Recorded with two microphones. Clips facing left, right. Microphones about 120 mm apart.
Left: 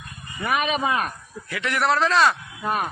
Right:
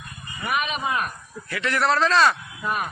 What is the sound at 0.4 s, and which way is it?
Speech, 90° left.